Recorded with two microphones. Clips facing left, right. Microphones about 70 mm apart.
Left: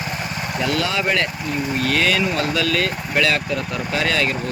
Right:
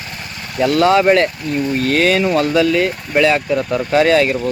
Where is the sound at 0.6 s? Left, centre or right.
Right.